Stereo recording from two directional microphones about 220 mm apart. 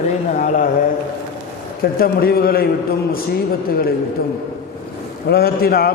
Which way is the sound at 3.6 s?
40° left (ahead or behind).